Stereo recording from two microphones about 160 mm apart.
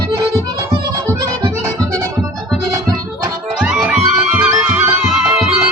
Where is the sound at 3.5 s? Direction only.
5° right (ahead or behind).